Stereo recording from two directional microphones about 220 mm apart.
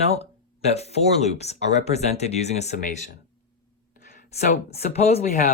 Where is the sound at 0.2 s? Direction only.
30° left (ahead or behind).